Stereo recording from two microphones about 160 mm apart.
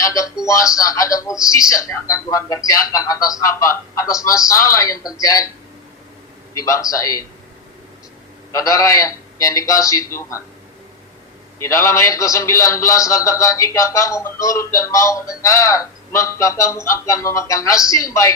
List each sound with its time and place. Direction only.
0.0 s a man's voice: 20° left (ahead or behind)
6.5 s a man's voice: 20° left (ahead or behind)
8.5 s a man's voice: 20° left (ahead or behind)
11.6 s a man's voice: 20° left (ahead or behind)